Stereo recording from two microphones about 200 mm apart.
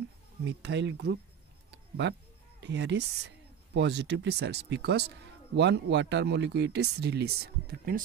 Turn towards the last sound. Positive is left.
turn(degrees=-50)  # may be behind; listen again after turning